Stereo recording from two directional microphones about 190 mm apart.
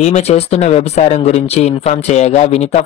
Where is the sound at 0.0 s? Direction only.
35° left (ahead or behind).